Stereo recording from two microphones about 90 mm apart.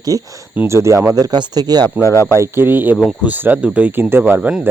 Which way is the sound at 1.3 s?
50° right (ahead or behind).